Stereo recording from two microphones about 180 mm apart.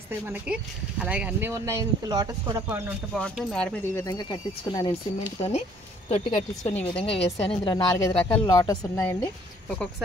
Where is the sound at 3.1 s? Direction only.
5° left (ahead or behind); by 5.3 s 25° left (ahead or behind).